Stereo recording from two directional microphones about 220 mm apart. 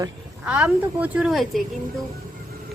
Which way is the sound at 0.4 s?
5° right (ahead or behind).